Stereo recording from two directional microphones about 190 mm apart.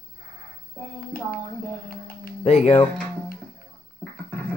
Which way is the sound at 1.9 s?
50° left (ahead or behind).